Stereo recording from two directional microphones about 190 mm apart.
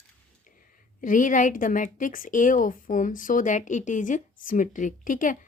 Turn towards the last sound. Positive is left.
turn(degrees=45)  # may be behind; listen again after turning